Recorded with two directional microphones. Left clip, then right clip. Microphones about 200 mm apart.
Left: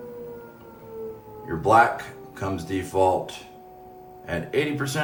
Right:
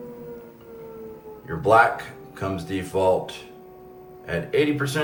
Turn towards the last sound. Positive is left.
turn(degrees=50)  # may be behind; listen again after turning